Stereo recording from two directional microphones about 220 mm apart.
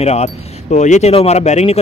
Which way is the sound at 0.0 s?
30° left (ahead or behind).